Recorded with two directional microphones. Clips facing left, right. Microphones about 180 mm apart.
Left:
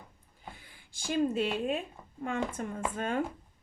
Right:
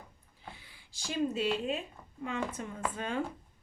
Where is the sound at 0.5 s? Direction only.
50° left (ahead or behind).